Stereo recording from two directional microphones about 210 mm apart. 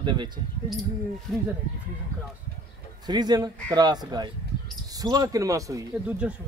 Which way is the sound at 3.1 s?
20° right (ahead or behind).